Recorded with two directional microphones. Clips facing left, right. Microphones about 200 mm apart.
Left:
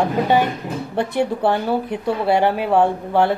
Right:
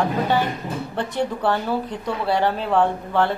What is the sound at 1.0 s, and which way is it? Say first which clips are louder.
A woman's voice: left 5 dB; 15° left (ahead or behind).